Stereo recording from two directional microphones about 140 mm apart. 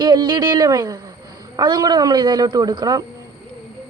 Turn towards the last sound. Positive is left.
turn(degrees=-25)  # may be behind; listen again after turning